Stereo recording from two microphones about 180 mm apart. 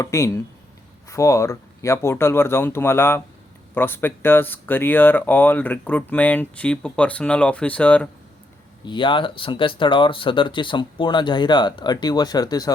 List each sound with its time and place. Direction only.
0.0 s speech: 15° left (ahead or behind)
8.9 s speech: 25° left (ahead or behind)